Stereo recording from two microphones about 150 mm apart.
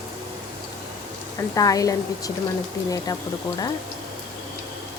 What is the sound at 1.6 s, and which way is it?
Speech, 25° left (ahead or behind).